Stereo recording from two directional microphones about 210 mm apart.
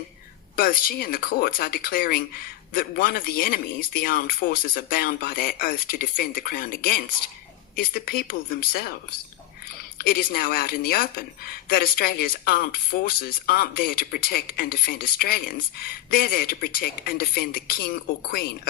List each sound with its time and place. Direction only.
0.5 s speech: 45° left (ahead or behind)